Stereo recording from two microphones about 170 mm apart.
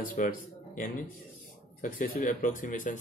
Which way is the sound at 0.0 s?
50° left (ahead or behind).